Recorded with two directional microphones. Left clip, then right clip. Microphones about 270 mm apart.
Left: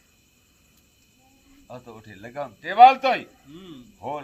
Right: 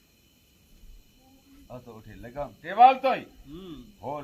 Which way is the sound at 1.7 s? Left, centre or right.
Left.